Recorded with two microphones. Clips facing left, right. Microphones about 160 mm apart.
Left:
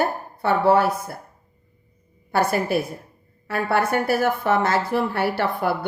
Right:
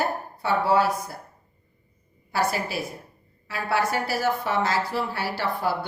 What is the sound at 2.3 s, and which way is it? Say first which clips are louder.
A woman's voice: left 5 dB; 55° left (ahead or behind).